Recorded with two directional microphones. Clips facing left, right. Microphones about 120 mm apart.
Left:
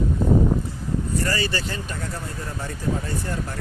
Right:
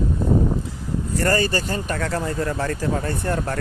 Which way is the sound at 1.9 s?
80° right.